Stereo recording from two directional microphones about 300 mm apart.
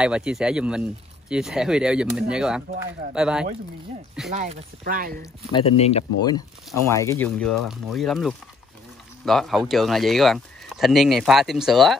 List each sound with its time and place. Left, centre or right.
0.0 s speech: centre
4.3 s speech: right
5.2 s speech: centre